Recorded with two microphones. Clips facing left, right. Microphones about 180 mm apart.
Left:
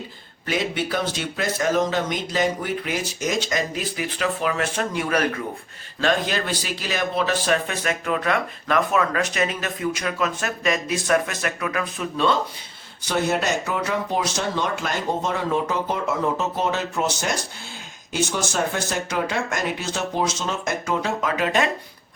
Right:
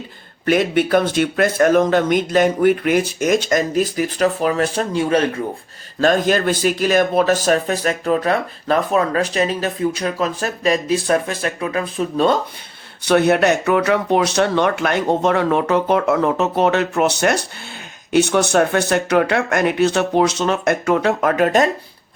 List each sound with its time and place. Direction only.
0.4 s speech: 55° right (ahead or behind); by 5.4 s 25° right (ahead or behind)
6.0 s speech: 45° right (ahead or behind)
13.1 s speech: 65° right (ahead or behind); by 21.7 s 45° right (ahead or behind)